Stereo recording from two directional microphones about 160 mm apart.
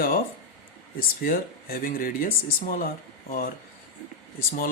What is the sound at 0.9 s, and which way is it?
Speech, 65° left (ahead or behind).